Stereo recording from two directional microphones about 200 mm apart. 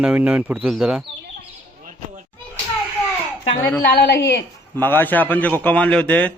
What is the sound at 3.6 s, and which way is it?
Speech, 10° left (ahead or behind).